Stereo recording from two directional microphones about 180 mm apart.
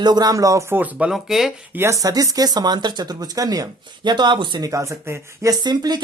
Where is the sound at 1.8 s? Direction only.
20° right (ahead or behind).